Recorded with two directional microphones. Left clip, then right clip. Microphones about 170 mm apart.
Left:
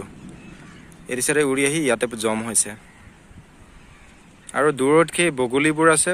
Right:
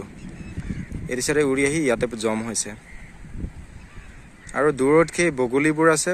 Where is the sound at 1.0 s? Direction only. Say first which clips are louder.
Left 1 dB; centre (ahead or behind).